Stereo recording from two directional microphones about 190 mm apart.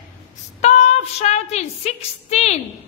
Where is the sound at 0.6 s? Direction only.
35° left (ahead or behind).